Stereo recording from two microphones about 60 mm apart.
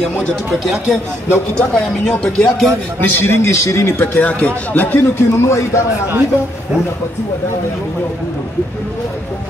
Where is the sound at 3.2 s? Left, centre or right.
Left.